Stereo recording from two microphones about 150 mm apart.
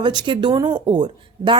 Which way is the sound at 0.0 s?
30° right (ahead or behind).